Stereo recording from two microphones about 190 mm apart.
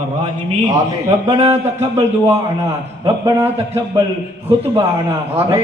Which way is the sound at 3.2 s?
10° right (ahead or behind).